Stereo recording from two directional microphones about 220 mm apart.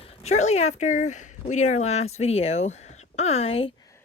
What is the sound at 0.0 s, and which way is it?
Speech, 30° left (ahead or behind).